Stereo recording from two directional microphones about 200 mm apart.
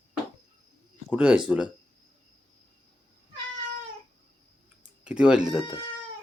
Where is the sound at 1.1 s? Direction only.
5° right (ahead or behind).